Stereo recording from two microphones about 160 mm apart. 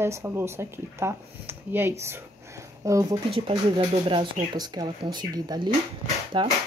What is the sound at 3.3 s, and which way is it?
Speech, 35° right (ahead or behind).